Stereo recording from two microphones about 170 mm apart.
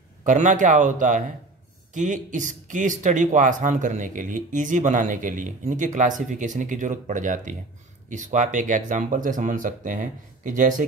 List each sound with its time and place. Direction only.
0.2 s speech: 45° right (ahead or behind)